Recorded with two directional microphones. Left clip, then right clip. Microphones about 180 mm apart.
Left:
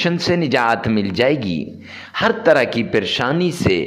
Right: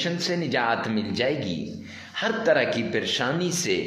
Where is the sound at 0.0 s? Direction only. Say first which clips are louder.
Left 8 dB; 45° left (ahead or behind).